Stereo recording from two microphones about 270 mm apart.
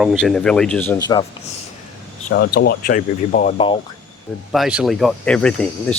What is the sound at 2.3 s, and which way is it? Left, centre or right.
Speech, left.